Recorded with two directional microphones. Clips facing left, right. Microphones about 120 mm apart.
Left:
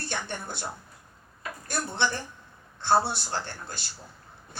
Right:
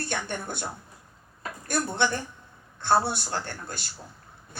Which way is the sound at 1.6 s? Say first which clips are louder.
Right 3 dB; 50° right (ahead or behind).